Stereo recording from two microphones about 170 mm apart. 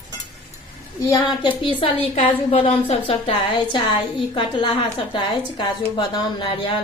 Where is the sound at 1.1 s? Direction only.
30° left (ahead or behind).